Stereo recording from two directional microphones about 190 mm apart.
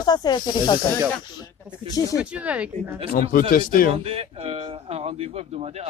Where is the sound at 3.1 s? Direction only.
50° left (ahead or behind).